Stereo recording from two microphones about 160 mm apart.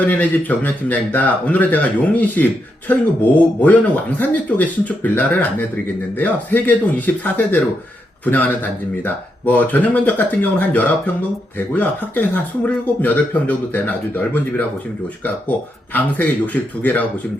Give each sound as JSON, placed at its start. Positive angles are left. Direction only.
{"t": 0.0, "sound": "a man's voice", "side_deg": 10}
{"t": 15.2, "sound": "a man's voice", "side_deg": 10}